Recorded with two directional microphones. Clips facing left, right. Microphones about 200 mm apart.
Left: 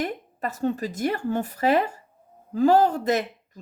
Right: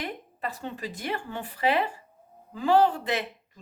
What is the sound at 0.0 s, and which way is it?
Speech, 45° left (ahead or behind).